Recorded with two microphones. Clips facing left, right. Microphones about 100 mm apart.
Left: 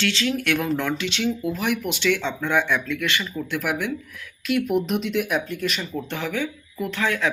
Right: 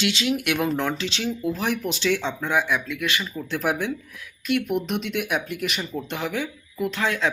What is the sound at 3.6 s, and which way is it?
Speech, 30° right (ahead or behind).